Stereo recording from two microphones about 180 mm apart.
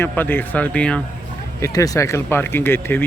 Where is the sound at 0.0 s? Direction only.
10° left (ahead or behind).